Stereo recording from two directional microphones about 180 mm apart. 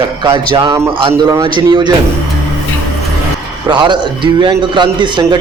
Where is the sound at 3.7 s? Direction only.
25° right (ahead or behind).